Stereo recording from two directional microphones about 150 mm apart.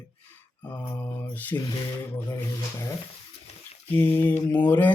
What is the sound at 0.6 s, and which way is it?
Speech, 10° left (ahead or behind).